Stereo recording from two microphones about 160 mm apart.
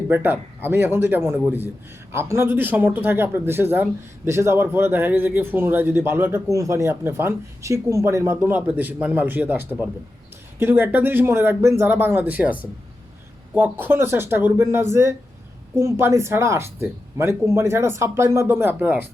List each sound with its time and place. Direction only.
0.1 s speech: 15° right (ahead or behind)